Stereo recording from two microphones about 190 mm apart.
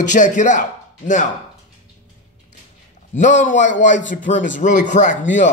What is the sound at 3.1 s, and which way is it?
A man's voice, 40° left (ahead or behind).